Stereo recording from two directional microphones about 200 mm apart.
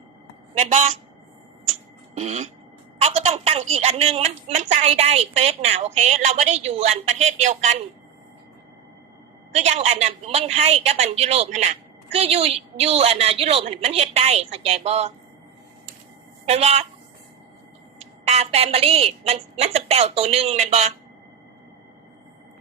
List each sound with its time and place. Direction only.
0.5 s a woman's voice: 35° right (ahead or behind)
2.1 s a woman's voice: 35° right (ahead or behind)
9.6 s a woman's voice: 35° right (ahead or behind)
16.5 s a woman's voice: 30° right (ahead or behind)
18.0 s a woman's voice: 35° right (ahead or behind)